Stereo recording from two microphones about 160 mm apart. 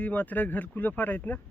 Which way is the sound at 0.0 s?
10° left (ahead or behind).